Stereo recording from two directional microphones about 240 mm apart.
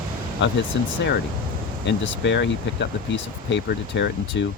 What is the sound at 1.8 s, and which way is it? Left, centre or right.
Speech, left.